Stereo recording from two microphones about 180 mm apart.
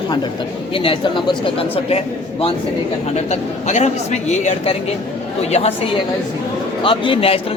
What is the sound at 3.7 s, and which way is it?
A man's voice, 40° left (ahead or behind).